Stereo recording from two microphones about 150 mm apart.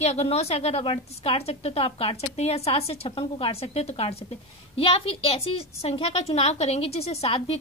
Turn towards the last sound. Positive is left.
turn(degrees=40)  # may be behind; listen again after turning